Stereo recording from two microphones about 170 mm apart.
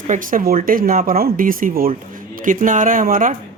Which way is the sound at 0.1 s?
55° right (ahead or behind).